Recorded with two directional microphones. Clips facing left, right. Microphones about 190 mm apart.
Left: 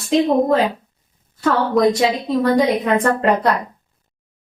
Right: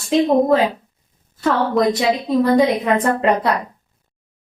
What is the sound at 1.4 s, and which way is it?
A woman's voice, centre (ahead or behind).